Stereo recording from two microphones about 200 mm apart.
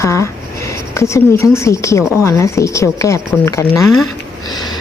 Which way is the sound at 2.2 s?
15° left (ahead or behind).